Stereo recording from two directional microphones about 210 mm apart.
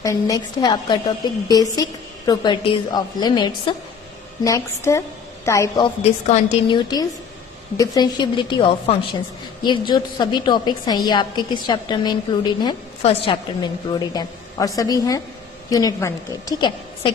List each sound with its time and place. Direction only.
0.0 s a woman's voice: 15° left (ahead or behind)